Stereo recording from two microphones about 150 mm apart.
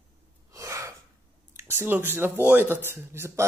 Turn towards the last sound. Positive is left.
turn(degrees=-15)  # may be behind; listen again after turning